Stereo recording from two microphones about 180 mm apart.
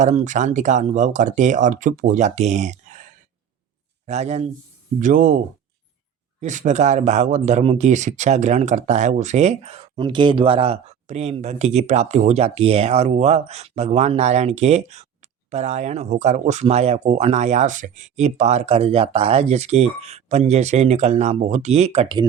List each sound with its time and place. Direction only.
0.0 s a man's voice: 40° right (ahead or behind)
6.4 s speech: 40° right (ahead or behind)